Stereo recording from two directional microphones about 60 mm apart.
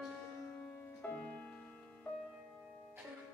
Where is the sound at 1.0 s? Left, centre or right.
Left.